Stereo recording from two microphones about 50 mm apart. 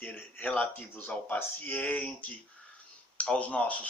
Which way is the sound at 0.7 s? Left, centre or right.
Left.